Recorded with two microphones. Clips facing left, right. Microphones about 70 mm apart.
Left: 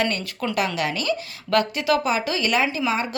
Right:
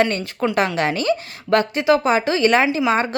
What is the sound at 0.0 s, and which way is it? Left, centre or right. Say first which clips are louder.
A woman's voice: right 5 dB; right.